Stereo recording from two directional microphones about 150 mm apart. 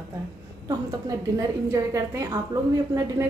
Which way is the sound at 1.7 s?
20° right (ahead or behind).